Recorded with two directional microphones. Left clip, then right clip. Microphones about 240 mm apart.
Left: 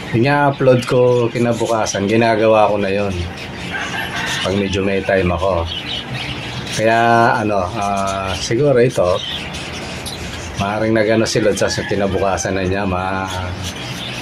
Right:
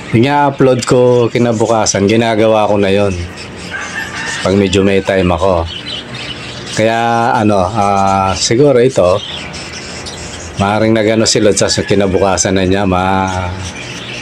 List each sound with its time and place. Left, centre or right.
0.2 s speech: right
4.5 s speech: right
6.8 s speech: right
10.6 s speech: right